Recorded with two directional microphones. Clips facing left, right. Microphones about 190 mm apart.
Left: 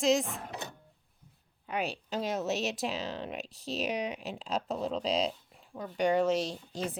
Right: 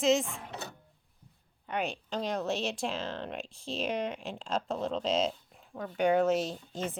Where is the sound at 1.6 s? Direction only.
5° left (ahead or behind).